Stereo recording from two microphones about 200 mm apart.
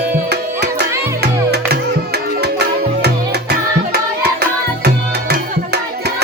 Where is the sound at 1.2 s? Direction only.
55° right (ahead or behind).